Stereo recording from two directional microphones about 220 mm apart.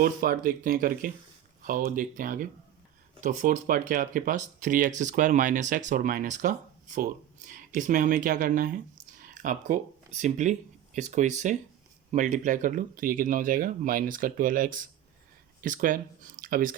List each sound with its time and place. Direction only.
0.0 s speech: 40° right (ahead or behind)